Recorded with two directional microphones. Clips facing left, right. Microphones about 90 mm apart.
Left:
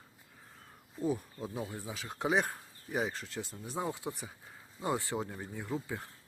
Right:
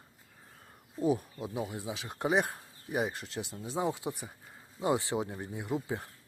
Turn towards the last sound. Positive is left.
turn(degrees=-20)  # may be behind; listen again after turning